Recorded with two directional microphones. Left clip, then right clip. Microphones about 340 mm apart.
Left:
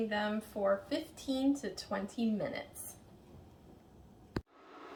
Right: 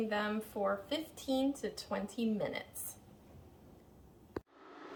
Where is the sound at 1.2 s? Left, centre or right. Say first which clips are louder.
Even; centre.